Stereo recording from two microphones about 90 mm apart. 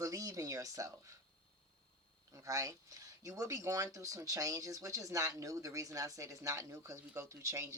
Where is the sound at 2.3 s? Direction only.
40° right (ahead or behind).